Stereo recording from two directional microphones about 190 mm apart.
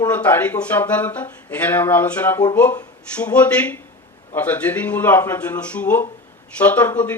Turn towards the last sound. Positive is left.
turn(degrees=10)  # may be behind; listen again after turning